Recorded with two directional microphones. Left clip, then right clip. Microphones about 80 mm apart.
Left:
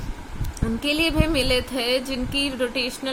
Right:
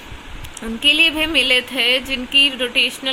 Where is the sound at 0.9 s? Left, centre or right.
Left.